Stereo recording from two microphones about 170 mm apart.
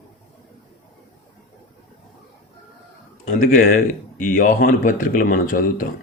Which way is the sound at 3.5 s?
45° left (ahead or behind).